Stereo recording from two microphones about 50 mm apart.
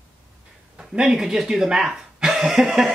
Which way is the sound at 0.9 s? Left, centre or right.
Centre.